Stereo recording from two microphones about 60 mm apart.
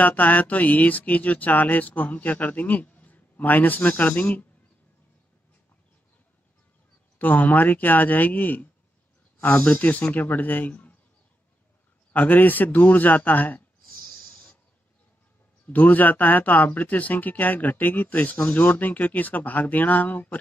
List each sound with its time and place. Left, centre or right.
0.0 s speech: left
7.2 s speech: left
12.1 s speech: left
15.6 s speech: left